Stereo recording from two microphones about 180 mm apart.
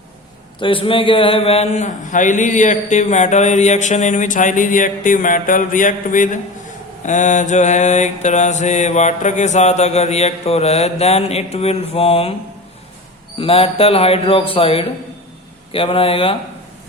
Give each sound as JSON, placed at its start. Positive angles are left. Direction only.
{"t": 0.6, "sound": "speech", "side_deg": 30}
{"t": 13.4, "sound": "speech", "side_deg": 30}